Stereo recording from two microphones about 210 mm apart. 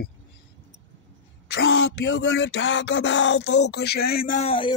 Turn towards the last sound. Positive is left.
turn(degrees=30)  # may be behind; listen again after turning